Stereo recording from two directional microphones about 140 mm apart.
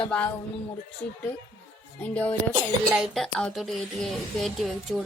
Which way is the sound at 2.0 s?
10° left (ahead or behind).